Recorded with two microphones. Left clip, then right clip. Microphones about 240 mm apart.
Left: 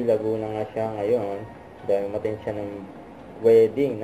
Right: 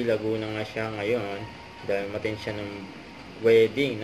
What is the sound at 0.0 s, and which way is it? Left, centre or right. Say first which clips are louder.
Speech: left 3 dB; right.